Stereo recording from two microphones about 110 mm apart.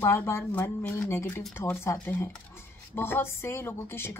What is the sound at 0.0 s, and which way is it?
A woman's voice, 20° left (ahead or behind).